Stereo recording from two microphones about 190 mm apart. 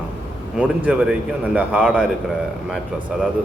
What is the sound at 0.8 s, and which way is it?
A man's voice, 5° right (ahead or behind).